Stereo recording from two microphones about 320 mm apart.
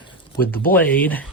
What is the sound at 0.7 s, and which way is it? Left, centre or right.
Speech, centre.